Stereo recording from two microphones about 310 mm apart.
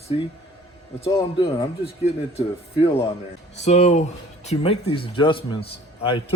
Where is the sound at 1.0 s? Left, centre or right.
Centre.